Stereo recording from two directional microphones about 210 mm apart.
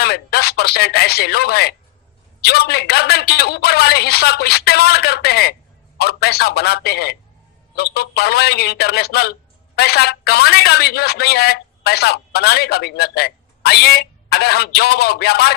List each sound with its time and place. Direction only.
0.0 s a man's voice: 50° left (ahead or behind)